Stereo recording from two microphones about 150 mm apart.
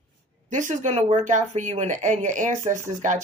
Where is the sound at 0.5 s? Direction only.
55° right (ahead or behind).